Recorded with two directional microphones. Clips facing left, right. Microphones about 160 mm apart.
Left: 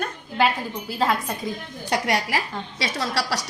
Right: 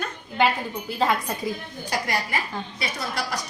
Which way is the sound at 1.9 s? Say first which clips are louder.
Left 4 dB; 75° left (ahead or behind).